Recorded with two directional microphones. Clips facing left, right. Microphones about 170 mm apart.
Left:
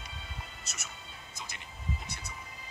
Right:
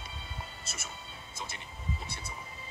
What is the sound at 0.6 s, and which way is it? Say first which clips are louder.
Music: right 3 dB; 30° right (ahead or behind).